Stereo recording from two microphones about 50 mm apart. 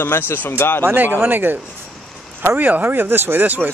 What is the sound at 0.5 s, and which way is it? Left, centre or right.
Speech, left.